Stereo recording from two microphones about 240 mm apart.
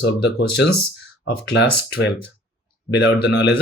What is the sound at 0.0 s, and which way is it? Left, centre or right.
Speech, left.